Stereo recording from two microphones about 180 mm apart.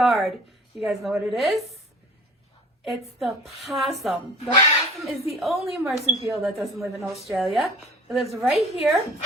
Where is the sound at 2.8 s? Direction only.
Centre (ahead or behind).